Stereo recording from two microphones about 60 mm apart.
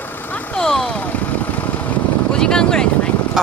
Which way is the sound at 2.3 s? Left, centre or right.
Centre.